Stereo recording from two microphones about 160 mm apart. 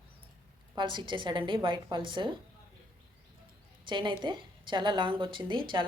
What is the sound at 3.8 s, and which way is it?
A woman's voice, 30° right (ahead or behind).